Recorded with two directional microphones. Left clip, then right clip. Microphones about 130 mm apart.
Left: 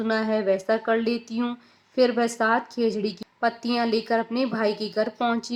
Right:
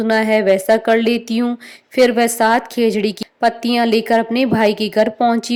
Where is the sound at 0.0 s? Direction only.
60° right (ahead or behind).